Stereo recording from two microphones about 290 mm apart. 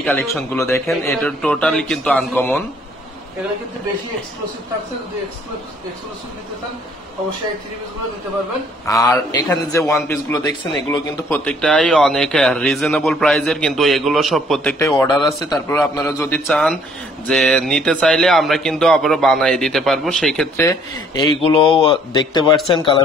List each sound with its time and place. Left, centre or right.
0.0 s speech: centre
8.8 s a man's voice: centre
20.6 s a man's voice: centre